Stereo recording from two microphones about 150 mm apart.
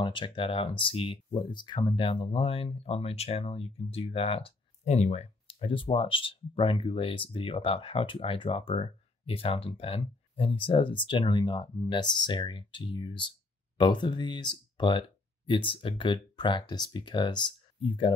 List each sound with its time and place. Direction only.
0.0 s speech: 35° left (ahead or behind)